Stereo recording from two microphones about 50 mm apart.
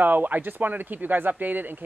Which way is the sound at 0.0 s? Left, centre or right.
Right.